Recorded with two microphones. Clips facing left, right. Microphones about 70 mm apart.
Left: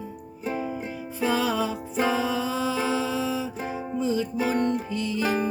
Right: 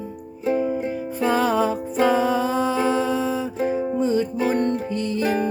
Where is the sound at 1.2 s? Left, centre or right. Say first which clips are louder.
Right 5 dB; right.